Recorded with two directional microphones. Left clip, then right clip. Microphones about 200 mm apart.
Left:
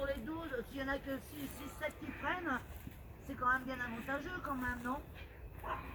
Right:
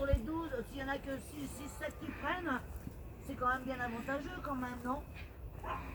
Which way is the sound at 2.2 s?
40° right (ahead or behind).